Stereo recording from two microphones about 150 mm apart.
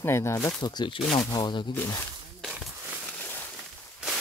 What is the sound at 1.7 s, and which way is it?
Speech, 15° left (ahead or behind).